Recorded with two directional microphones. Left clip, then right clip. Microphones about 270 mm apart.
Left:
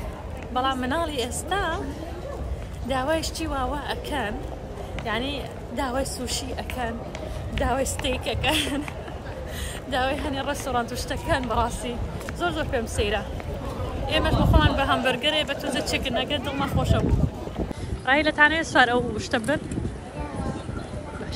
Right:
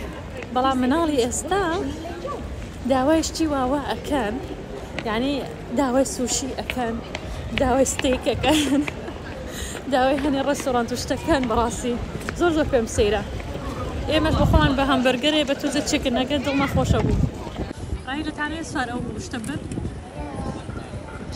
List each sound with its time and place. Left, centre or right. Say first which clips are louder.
0.6 s speech: right 4 dB; centre
2.9 s speech: right 5 dB; centre
18.7 s a woman's voice: left 8 dB; centre